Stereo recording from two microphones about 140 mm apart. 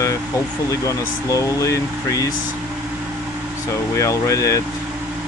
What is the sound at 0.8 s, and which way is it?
Speech, 20° left (ahead or behind).